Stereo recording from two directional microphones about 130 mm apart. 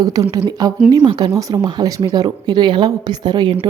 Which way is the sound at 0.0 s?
30° right (ahead or behind).